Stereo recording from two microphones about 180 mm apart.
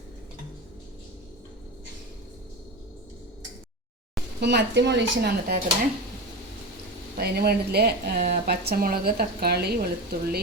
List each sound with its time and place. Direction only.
4.4 s speech: 70° right (ahead or behind)
7.2 s speech: 60° right (ahead or behind)